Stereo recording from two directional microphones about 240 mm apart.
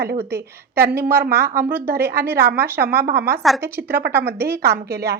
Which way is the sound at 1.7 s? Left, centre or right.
Centre.